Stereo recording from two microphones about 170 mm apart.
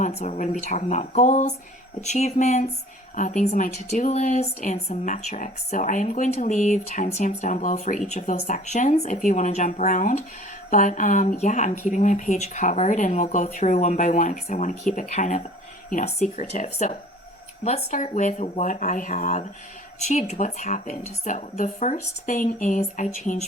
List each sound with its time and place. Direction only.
0.0 s speech: 40° left (ahead or behind)